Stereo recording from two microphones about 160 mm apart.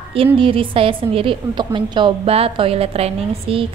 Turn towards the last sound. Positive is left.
turn(degrees=-35)  # may be behind; listen again after turning